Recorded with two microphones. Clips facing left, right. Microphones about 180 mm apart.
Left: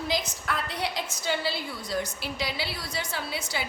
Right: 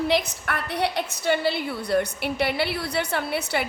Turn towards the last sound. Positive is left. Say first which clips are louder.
# right 7 dB
turn(degrees=-60)  # may be behind; listen again after turning